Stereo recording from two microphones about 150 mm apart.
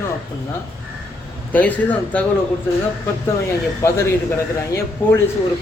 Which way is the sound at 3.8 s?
20° left (ahead or behind).